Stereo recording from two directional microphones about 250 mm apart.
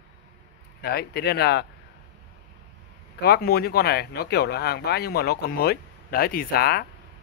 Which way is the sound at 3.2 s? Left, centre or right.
Left.